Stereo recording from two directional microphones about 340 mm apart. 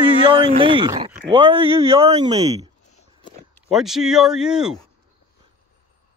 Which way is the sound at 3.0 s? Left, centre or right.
Centre.